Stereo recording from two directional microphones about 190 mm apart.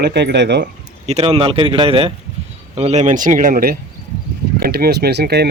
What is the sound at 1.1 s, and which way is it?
Speech, 35° right (ahead or behind).